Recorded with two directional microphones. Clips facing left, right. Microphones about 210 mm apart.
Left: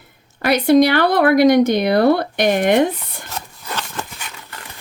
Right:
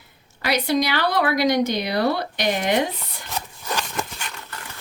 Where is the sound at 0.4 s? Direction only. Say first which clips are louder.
Left 9 dB; 55° left (ahead or behind).